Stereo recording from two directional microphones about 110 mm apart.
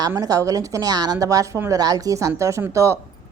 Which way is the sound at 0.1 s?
30° right (ahead or behind).